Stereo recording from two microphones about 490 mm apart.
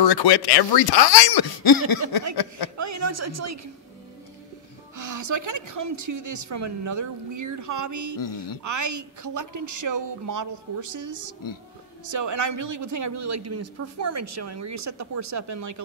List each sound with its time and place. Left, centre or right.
0.0 s speech: left
2.8 s a man's voice: right
4.9 s a man's voice: right
8.2 s speech: left
8.6 s a man's voice: right